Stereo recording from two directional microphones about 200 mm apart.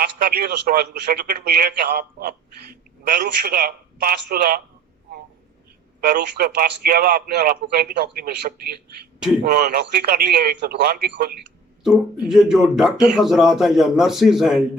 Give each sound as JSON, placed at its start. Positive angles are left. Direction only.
{"t": 0.0, "sound": "a man's voice", "side_deg": -50}
{"t": 6.0, "sound": "a man's voice", "side_deg": -50}
{"t": 11.8, "sound": "speech", "side_deg": -5}